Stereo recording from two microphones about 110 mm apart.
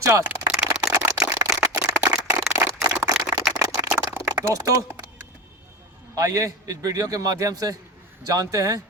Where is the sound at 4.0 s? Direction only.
30° right (ahead or behind).